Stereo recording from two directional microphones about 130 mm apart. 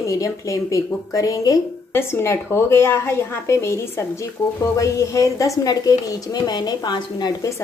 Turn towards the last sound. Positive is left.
turn(degrees=25)  # may be behind; listen again after turning